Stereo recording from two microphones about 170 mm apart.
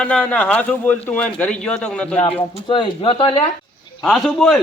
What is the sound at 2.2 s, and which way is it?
A woman's voice, 30° left (ahead or behind).